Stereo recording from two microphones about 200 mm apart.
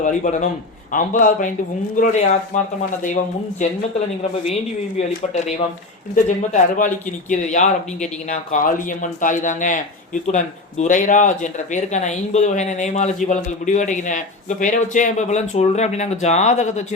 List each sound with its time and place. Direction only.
0.0 s speech: 40° left (ahead or behind)
4.9 s speech: 35° left (ahead or behind)